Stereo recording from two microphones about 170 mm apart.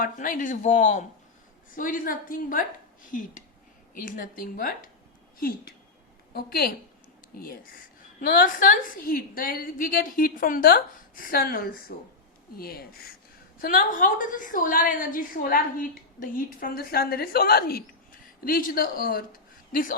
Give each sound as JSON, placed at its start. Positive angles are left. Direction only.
{"t": 0.0, "sound": "a woman's voice", "side_deg": 50}